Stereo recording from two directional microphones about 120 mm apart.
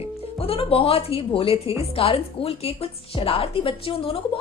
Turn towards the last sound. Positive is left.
turn(degrees=50)  # may be behind; listen again after turning